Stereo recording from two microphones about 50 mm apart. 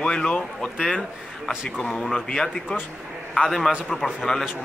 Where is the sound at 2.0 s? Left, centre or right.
Centre.